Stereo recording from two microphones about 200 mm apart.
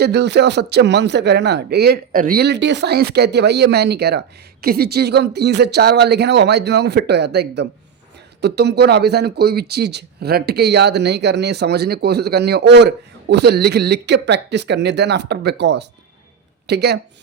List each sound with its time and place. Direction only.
0.0 s speech: 55° right (ahead or behind)